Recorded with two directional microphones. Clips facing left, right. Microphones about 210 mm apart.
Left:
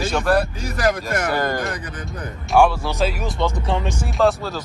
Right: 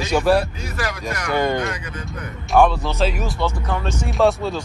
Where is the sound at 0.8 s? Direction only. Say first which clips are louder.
Left 6 dB; 50° left (ahead or behind).